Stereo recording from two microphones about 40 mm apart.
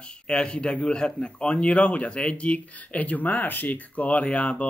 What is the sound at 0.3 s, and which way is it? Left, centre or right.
Speech, left.